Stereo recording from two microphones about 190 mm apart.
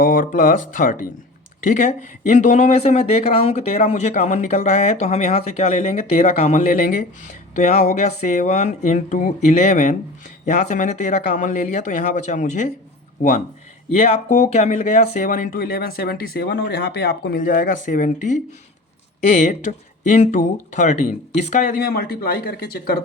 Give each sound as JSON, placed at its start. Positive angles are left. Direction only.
{"t": 0.0, "sound": "speech", "side_deg": 45}
{"t": 13.9, "sound": "speech", "side_deg": 35}